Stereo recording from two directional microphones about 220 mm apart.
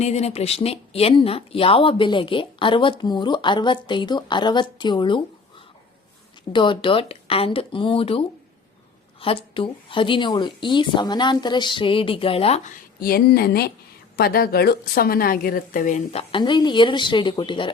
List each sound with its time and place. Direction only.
0.0 s a woman's voice: 30° left (ahead or behind)